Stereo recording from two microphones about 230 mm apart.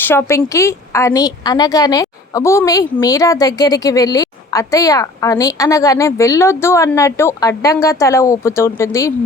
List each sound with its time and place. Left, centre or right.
0.0 s a woman's voice: centre